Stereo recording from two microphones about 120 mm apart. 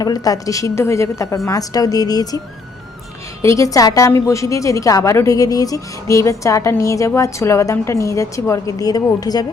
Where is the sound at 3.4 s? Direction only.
25° left (ahead or behind).